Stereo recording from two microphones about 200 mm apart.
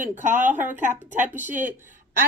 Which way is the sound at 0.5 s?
10° right (ahead or behind).